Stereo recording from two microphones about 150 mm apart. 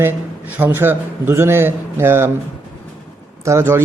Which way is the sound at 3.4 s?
20° right (ahead or behind).